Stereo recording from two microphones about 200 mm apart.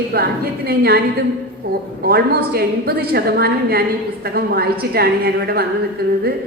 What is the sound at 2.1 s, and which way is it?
A woman's voice, 50° right (ahead or behind).